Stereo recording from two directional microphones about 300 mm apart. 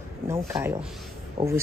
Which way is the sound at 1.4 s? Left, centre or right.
Centre.